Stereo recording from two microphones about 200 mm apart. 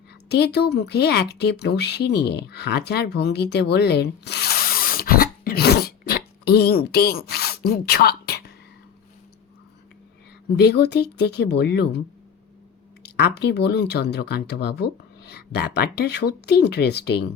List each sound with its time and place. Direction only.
0.3 s speech: 55° left (ahead or behind)
10.6 s speech: 55° left (ahead or behind)